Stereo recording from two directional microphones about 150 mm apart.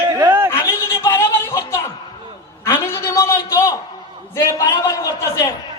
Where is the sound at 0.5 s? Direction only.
20° left (ahead or behind).